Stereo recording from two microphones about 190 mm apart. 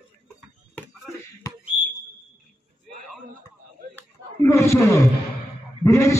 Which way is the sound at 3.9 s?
15° left (ahead or behind).